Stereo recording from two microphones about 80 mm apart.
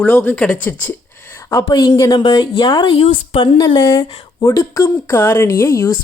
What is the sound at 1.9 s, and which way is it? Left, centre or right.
Speech, left.